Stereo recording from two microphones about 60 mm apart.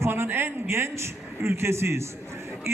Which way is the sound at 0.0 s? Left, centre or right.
Right.